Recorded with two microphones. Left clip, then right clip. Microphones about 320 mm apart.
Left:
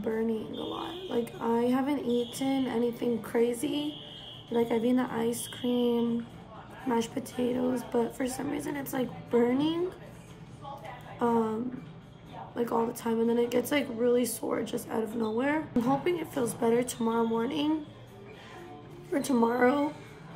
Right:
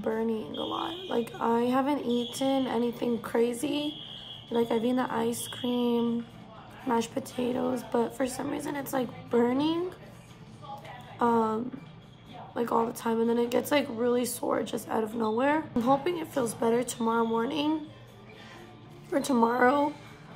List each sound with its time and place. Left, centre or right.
0.0 s a woman's voice: centre
6.9 s a woman's voice: centre
11.1 s a woman's voice: centre
12.5 s a woman's voice: centre
19.1 s a woman's voice: centre